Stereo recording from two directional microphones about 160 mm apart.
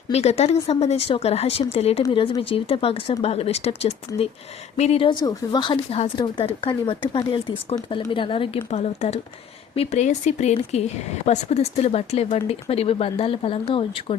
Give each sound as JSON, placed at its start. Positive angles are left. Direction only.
{"t": 0.1, "sound": "speech", "side_deg": 40}